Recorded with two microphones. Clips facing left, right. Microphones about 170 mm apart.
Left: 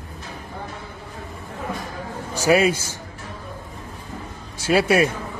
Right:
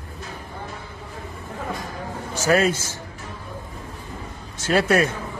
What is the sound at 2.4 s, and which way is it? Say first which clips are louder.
Speech: left 2 dB; 10° left (ahead or behind).